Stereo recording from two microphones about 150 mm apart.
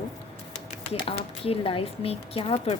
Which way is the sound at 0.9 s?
40° left (ahead or behind).